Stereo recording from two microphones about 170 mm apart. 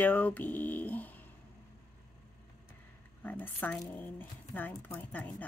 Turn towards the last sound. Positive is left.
turn(degrees=10)  # may be behind; listen again after turning